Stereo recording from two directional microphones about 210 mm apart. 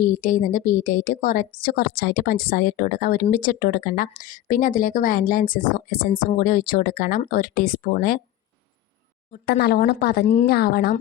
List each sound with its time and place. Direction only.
0.0 s a woman's voice: 40° left (ahead or behind)
9.3 s speech: 50° left (ahead or behind)